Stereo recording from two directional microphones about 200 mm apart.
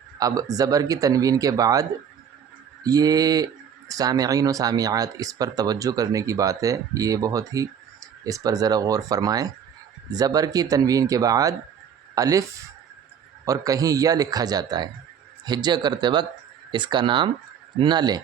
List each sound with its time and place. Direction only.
0.2 s speech: 15° right (ahead or behind)